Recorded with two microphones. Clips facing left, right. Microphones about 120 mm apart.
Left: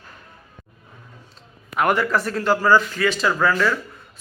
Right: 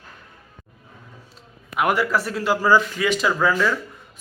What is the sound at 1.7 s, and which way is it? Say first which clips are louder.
Speech: left 1 dB; 5° right (ahead or behind).